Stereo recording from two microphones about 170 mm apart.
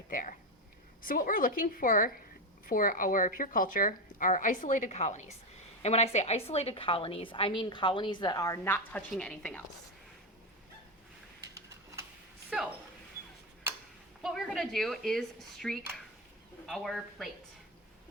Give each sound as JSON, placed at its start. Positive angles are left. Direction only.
{"t": 0.1, "sound": "a woman's voice", "side_deg": 55}
{"t": 11.5, "sound": "a sound", "side_deg": -20}
{"t": 14.2, "sound": "speech", "side_deg": 0}